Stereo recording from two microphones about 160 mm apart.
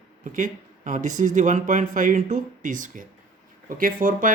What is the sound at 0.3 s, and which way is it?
Speech, 55° right (ahead or behind).